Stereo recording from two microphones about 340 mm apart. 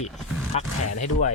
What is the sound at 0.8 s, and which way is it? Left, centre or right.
Speech, left.